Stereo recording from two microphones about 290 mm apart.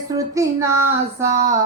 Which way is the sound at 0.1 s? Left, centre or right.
Centre.